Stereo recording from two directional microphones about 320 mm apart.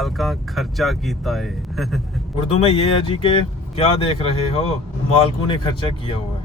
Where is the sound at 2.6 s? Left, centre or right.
Centre.